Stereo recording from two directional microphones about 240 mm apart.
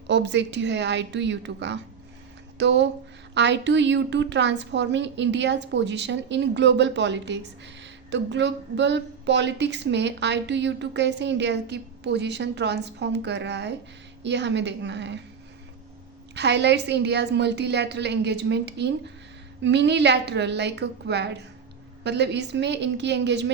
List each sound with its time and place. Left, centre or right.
0.1 s a woman's voice: right
16.3 s a woman's voice: right